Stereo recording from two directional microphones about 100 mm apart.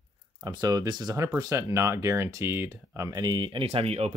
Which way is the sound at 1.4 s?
30° right (ahead or behind).